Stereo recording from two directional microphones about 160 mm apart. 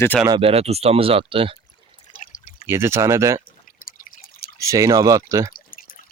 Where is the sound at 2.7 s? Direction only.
15° right (ahead or behind).